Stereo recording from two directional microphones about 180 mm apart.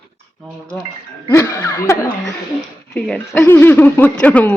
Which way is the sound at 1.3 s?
15° left (ahead or behind).